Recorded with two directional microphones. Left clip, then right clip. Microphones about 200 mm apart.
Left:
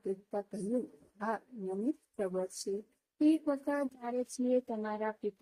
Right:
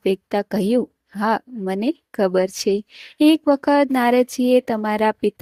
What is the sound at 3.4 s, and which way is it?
Speech, 45° right (ahead or behind).